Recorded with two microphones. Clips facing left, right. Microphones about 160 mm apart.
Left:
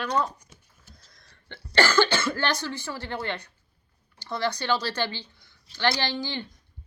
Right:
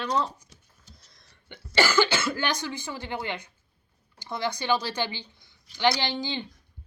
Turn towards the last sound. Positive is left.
turn(degrees=-20)  # may be behind; listen again after turning